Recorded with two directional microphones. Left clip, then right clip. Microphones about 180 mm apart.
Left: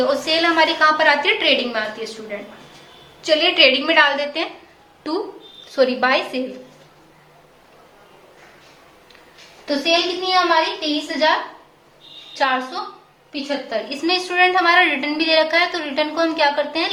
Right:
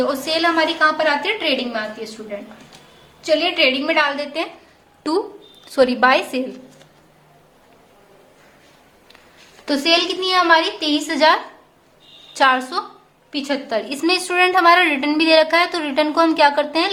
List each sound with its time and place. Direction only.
0.0 s a woman's voice: 25° right (ahead or behind)
3.2 s a woman's voice: 20° right (ahead or behind)
9.6 s a woman's voice: 45° right (ahead or behind); by 16.9 s 30° right (ahead or behind)